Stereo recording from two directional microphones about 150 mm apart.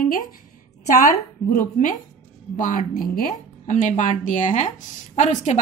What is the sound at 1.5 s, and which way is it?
A woman's voice, 60° left (ahead or behind).